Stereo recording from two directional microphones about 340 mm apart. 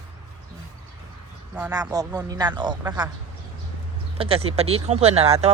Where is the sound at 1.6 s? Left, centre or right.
Centre.